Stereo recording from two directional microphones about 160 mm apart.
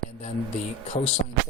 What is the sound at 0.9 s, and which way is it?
Speech, 40° left (ahead or behind).